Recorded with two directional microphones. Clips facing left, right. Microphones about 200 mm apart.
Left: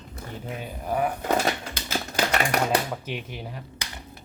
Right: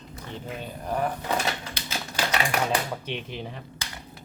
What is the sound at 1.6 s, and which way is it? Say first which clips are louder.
Typewriter: left 4 dB; 50° left (ahead or behind).